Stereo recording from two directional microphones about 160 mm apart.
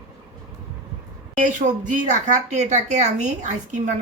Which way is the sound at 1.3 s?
50° right (ahead or behind).